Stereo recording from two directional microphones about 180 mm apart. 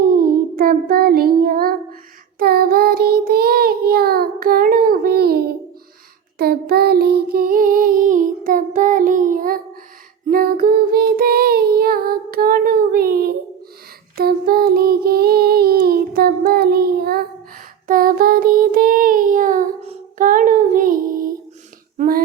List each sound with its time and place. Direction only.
0.0 s child singing: 55° right (ahead or behind)
6.4 s a sound: 60° right (ahead or behind)
10.2 s child singing: 55° right (ahead or behind)
19.8 s child singing: 35° right (ahead or behind)
20.2 s female singing: 45° right (ahead or behind)
21.9 s a sound: 50° right (ahead or behind)